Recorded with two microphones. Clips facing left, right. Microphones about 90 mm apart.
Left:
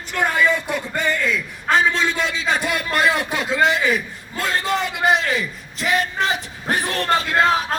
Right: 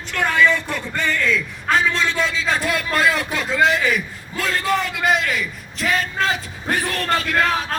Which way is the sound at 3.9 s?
25° left (ahead or behind).